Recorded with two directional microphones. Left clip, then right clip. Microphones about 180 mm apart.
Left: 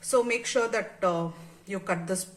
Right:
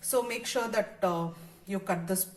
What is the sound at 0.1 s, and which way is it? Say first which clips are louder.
Speech: left 5 dB; 40° left (ahead or behind).